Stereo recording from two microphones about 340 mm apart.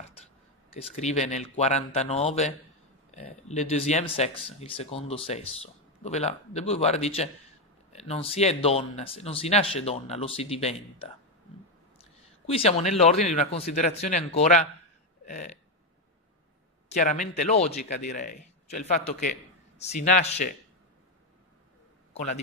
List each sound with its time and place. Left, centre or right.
0.9 s a man's voice: centre
15.2 s burping: left
16.9 s a man's voice: left